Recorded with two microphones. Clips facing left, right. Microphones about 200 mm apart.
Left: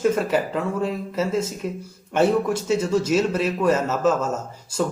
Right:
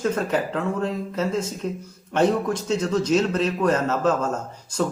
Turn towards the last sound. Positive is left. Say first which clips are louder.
# even
turn(degrees=5)  # may be behind; listen again after turning